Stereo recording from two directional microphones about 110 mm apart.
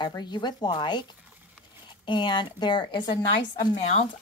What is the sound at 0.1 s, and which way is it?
Speech, 40° left (ahead or behind).